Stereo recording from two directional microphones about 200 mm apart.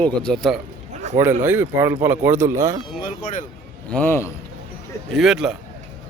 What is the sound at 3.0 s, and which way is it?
Speech, 40° left (ahead or behind).